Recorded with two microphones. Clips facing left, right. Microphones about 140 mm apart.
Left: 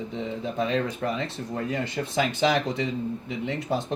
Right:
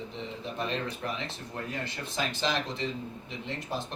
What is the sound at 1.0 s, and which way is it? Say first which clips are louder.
Speech: left 7 dB; 90° left.